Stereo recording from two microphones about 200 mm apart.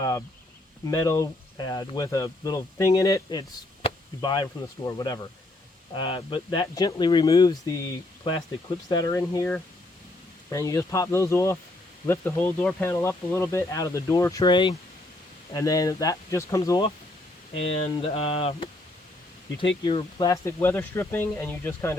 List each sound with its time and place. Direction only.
0.0 s speech: 15° left (ahead or behind)
3.8 s chop: 20° left (ahead or behind)
4.9 s speech: 20° left (ahead or behind)
8.9 s speech: 20° left (ahead or behind)
17.5 s speech: 30° left (ahead or behind)
19.8 s speech: 25° left (ahead or behind)